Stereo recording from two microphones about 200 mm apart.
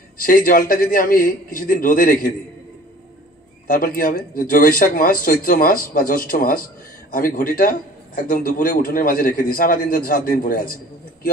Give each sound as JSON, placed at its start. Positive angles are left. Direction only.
{"t": 0.2, "sound": "a man's voice", "side_deg": 45}
{"t": 3.6, "sound": "a man's voice", "side_deg": 45}